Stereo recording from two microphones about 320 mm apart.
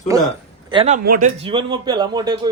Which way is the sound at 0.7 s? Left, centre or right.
Centre.